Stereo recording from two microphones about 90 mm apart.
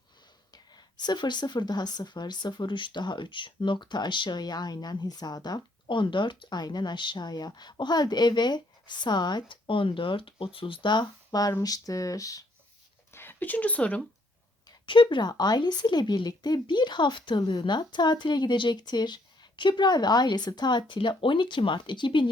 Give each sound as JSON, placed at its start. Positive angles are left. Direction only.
{"t": 0.5, "sound": "speech", "side_deg": 50}
{"t": 13.1, "sound": "speech", "side_deg": 20}
{"t": 14.8, "sound": "speech", "side_deg": 65}